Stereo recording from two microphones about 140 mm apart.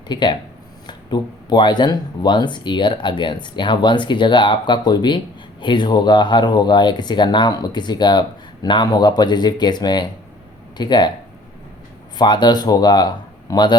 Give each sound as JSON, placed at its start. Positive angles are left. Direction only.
{"t": 0.1, "sound": "speech", "side_deg": 30}
{"t": 12.1, "sound": "speech", "side_deg": 30}